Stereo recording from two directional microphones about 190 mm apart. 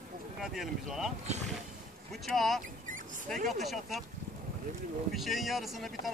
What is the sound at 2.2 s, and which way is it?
Speech, centre (ahead or behind).